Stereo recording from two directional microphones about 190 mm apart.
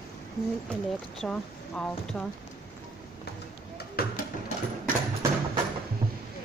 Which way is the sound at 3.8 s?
50° left (ahead or behind).